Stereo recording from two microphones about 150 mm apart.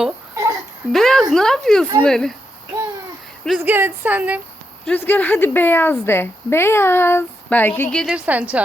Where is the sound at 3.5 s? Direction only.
10° right (ahead or behind).